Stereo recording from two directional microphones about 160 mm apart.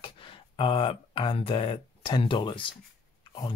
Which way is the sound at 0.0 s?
35° left (ahead or behind).